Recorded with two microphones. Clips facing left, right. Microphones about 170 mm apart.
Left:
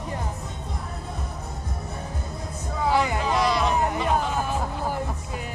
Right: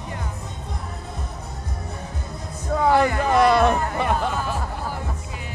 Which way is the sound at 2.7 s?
60° right (ahead or behind).